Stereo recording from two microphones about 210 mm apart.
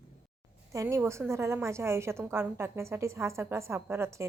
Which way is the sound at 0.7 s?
15° right (ahead or behind).